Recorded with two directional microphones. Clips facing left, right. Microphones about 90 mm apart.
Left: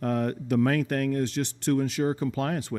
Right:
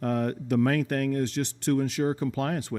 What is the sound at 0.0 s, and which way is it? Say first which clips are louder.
Speech: even; 35° right (ahead or behind).